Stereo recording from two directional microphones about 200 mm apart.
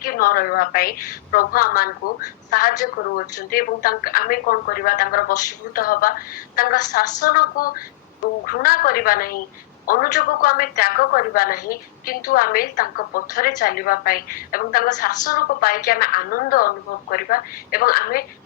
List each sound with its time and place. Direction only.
0.0 s a woman's voice: 45° left (ahead or behind)